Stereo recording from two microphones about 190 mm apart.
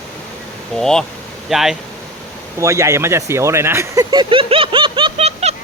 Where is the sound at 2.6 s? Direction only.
15° right (ahead or behind).